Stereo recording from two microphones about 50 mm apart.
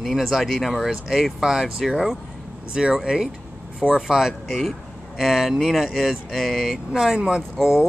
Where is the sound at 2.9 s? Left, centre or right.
Centre.